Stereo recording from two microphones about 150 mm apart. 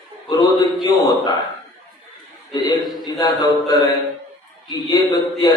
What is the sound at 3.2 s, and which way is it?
A man's voice, 25° left (ahead or behind).